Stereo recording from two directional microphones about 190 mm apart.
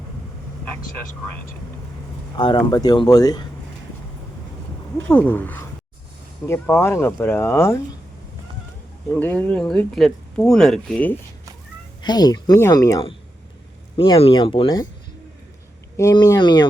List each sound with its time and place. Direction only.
2.3 s speech: 25° left (ahead or behind)
5.0 s speech: 10° left (ahead or behind)
9.1 s speech: 10° left (ahead or behind)
12.0 s speech: 20° left (ahead or behind)
13.9 s speech: 30° left (ahead or behind)
16.0 s speech: 20° left (ahead or behind)